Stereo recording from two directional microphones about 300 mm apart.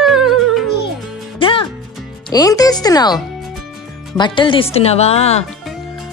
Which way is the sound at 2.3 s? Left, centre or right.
Centre.